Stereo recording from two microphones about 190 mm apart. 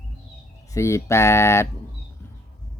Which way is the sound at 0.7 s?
15° left (ahead or behind).